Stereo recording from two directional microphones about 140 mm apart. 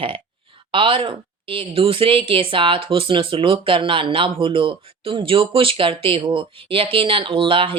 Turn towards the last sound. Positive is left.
turn(degrees=-40)  # may be behind; listen again after turning